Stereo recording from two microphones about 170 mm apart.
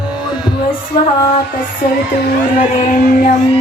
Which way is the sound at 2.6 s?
55° left (ahead or behind).